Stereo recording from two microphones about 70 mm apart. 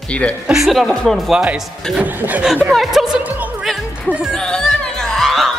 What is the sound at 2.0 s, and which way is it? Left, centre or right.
Speech, right.